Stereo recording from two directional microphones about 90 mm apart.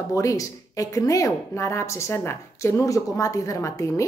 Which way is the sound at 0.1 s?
35° left (ahead or behind).